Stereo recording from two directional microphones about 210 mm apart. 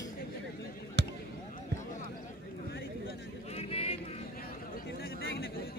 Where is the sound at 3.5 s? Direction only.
30° left (ahead or behind).